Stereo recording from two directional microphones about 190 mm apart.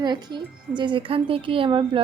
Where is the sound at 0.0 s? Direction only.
25° right (ahead or behind).